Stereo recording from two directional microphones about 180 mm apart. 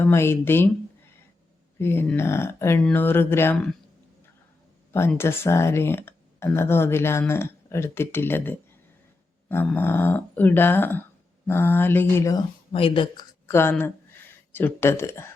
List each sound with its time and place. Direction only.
0.0 s speech: 15° left (ahead or behind)
1.8 s speech: 10° left (ahead or behind)
4.9 s speech: 15° left (ahead or behind)
12.7 s speech: 30° left (ahead or behind)
13.5 s speech: 10° left (ahead or behind)